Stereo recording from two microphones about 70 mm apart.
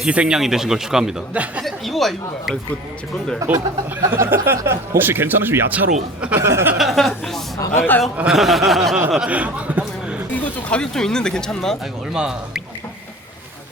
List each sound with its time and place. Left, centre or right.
0.0 s speech: centre
1.3 s speech: centre
1.6 s speech: centre
3.4 s speech: right
4.1 s speech: right
6.3 s speech: right
6.7 s speech: centre
7.8 s a man's voice: left
8.3 s speech: centre
9.3 s a sound: centre
10.3 s speech: centre
12.1 s speech: centre